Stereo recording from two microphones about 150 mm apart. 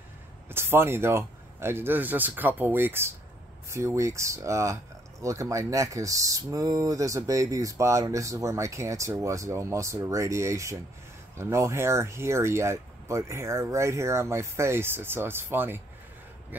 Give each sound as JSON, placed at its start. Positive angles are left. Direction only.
{"t": 0.5, "sound": "speech", "side_deg": -15}